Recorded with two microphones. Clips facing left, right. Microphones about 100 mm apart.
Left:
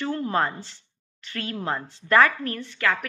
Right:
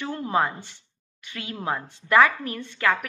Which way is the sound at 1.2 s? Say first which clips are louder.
Left 1 dB; 15° right (ahead or behind).